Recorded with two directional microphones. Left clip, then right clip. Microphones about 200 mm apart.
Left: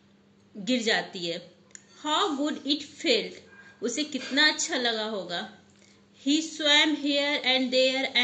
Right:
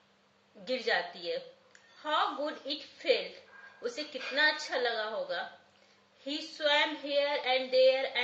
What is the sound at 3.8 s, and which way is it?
A woman's voice, 45° left (ahead or behind).